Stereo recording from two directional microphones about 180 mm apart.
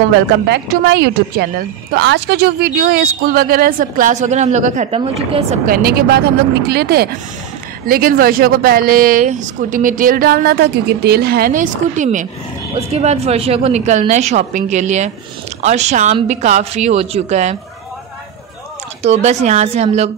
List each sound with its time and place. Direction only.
0.5 s a woman's voice: 70° right (ahead or behind); by 5.1 s 40° right (ahead or behind)
5.7 s a woman's voice: 55° right (ahead or behind); by 17.6 s 40° right (ahead or behind)
19.0 s a woman's voice: 40° right (ahead or behind)